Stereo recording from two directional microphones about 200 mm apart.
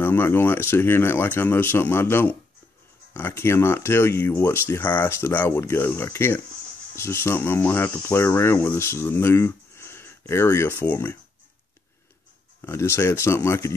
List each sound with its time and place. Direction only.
0.0 s speech: 10° left (ahead or behind)
12.6 s speech: 15° left (ahead or behind)